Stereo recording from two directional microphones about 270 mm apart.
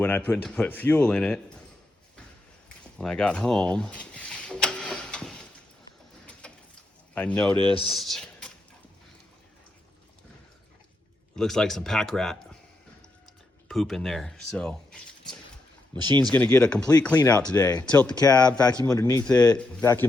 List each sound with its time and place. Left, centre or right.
0.0 s speech: centre
2.6 s a sound: centre
6.4 s sliding door: centre
7.1 s a man's voice: centre
7.5 s speech: centre
7.9 s speech: centre
11.3 s speech: centre
13.7 s speech: centre
15.9 s speech: centre
16.2 s speech: centre